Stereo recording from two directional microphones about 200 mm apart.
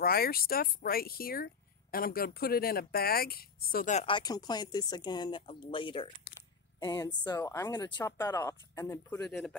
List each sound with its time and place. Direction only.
0.0 s speech: 50° left (ahead or behind); by 9.6 s 5° left (ahead or behind)